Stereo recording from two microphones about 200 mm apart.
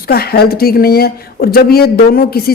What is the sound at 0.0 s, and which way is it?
A woman's voice, 50° left (ahead or behind).